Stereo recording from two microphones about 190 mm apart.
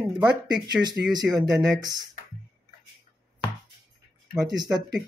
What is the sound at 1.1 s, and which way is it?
Speech, 20° right (ahead or behind).